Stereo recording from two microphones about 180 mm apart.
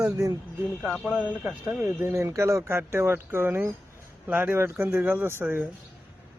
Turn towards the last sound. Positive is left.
turn(degrees=-10)  # may be behind; listen again after turning